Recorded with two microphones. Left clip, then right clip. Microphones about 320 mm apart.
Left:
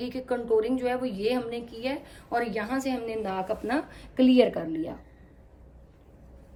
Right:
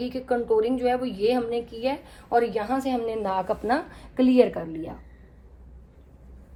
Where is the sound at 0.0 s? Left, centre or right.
Centre.